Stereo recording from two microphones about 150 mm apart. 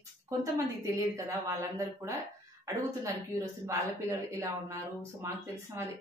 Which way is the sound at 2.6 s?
20° right (ahead or behind).